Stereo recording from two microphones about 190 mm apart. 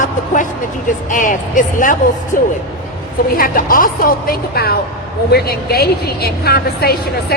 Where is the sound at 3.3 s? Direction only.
45° left (ahead or behind).